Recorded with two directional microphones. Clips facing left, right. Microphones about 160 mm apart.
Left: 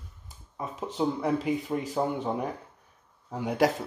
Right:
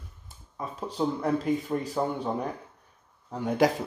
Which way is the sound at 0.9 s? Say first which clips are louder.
Even; 10° left (ahead or behind).